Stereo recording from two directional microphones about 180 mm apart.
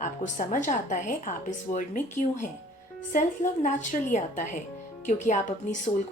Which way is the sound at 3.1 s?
45° left (ahead or behind).